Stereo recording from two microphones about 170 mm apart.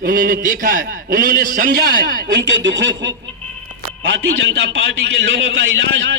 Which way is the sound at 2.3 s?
90° right.